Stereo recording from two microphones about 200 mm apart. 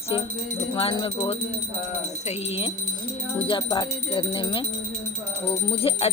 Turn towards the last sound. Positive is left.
turn(degrees=30)  # may be behind; listen again after turning